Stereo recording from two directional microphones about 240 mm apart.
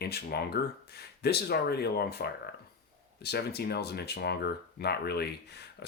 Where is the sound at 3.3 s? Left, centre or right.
Left.